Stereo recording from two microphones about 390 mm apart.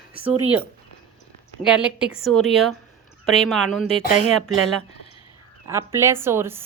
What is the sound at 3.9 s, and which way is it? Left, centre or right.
Speech, centre.